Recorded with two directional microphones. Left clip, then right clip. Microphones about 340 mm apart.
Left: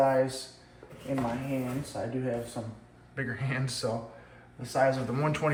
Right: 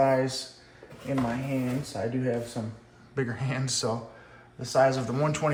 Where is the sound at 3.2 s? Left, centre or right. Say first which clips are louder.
Right 2 dB; centre.